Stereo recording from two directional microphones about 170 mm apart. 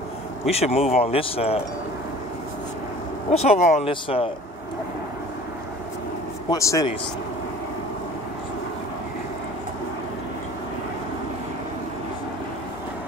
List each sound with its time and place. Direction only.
0.5 s speech: 35° left (ahead or behind)
3.3 s speech: 40° left (ahead or behind)
6.5 s speech: 20° left (ahead or behind)